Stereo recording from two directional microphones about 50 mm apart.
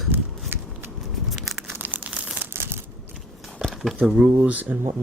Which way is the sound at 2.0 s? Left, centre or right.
Centre.